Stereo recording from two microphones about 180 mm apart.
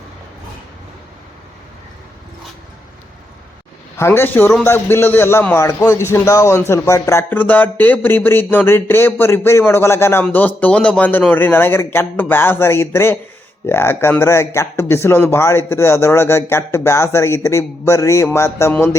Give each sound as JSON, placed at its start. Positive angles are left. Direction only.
{"t": 3.9, "sound": "a man's voice", "side_deg": 15}